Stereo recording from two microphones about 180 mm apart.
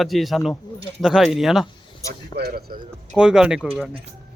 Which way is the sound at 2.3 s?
60° right (ahead or behind).